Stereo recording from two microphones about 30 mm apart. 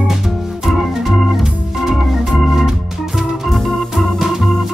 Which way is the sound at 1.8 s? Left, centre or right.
Centre.